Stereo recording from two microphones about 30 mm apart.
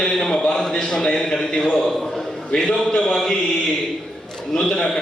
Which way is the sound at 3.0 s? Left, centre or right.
Centre.